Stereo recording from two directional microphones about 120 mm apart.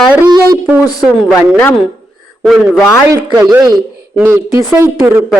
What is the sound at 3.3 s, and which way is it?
Speech, 35° right (ahead or behind).